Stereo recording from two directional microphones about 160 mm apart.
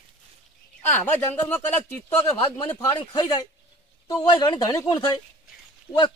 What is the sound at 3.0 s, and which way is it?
Speech, 30° left (ahead or behind).